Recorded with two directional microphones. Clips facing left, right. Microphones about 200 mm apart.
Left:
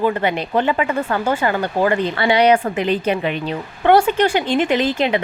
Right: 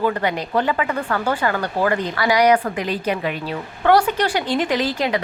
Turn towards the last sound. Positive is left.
turn(degrees=20)  # may be behind; listen again after turning